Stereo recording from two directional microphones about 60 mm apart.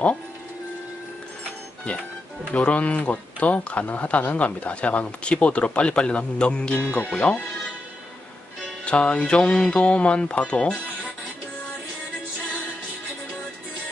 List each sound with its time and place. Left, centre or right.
2.5 s speech: left
8.8 s speech: centre